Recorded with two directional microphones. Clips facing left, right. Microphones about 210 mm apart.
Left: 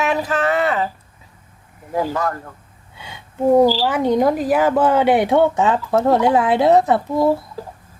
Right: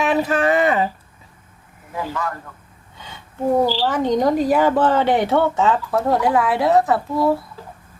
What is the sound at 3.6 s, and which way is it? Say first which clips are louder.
Speech: left 4 dB; 10° left (ahead or behind).